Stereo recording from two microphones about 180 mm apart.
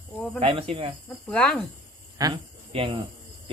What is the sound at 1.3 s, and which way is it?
Speech, 5° left (ahead or behind).